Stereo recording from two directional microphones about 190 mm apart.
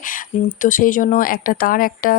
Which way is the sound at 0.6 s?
45° left (ahead or behind).